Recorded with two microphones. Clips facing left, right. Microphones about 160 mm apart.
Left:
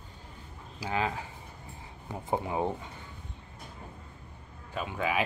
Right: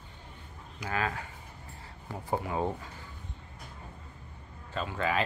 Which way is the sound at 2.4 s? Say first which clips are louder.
Left 1 dB; 20° left (ahead or behind).